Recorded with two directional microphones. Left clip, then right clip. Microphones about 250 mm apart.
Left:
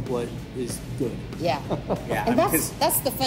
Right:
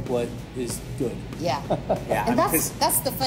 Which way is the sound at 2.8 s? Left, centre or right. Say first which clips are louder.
Left 1 dB; left.